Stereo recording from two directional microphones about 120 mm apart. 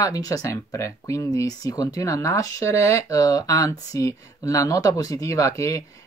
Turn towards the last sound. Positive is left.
turn(degrees=25)  # may be behind; listen again after turning